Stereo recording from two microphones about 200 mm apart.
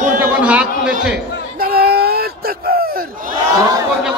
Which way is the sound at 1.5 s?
50° right (ahead or behind).